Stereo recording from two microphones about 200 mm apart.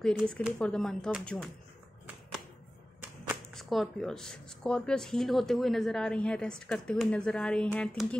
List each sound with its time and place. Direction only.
0.2 s speech: centre (ahead or behind)
3.0 s speech: 5° right (ahead or behind)